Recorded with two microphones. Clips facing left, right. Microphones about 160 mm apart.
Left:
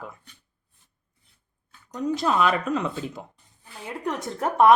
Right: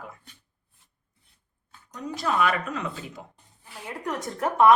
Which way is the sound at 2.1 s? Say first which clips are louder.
Left 2 dB; 25° left (ahead or behind).